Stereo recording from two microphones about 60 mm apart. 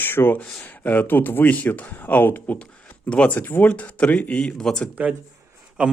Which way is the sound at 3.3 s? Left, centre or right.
Left.